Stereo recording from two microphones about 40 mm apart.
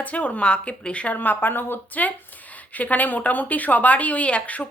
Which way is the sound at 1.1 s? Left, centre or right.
Left.